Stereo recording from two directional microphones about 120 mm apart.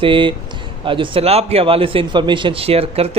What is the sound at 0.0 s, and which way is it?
A man's voice, 45° right (ahead or behind).